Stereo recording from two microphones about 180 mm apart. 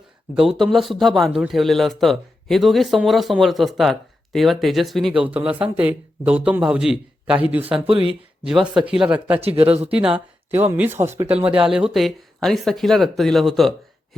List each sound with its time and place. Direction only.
0.5 s a man's voice: centre (ahead or behind)
9.4 s speech: 35° right (ahead or behind)
10.5 s a man's voice: 10° right (ahead or behind)